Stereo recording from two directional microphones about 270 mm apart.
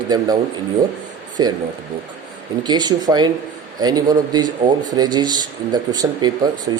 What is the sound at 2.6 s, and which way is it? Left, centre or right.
Speech, centre.